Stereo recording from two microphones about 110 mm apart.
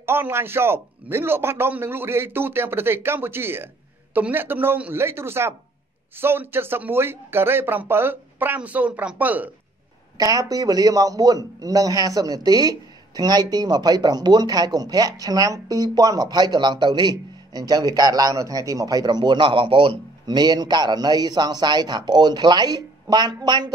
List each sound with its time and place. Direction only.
0.0 s a man's voice: 20° right (ahead or behind)
10.1 s a man's voice: 35° right (ahead or behind)